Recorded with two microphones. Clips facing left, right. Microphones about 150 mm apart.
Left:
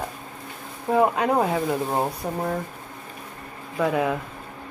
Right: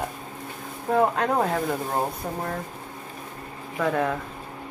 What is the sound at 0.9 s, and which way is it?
Speech, 5° left (ahead or behind).